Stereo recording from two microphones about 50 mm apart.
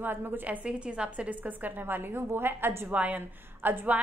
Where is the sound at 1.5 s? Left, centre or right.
Right.